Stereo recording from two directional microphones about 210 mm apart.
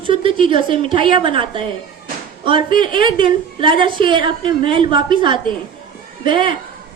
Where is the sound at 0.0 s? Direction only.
25° right (ahead or behind).